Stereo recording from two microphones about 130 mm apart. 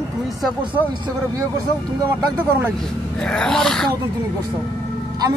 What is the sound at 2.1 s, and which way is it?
Speech, 15° right (ahead or behind).